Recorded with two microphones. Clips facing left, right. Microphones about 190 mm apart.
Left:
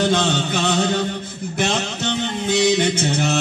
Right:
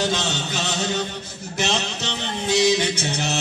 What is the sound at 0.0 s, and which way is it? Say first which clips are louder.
Music: left 6 dB; 55° left (ahead or behind).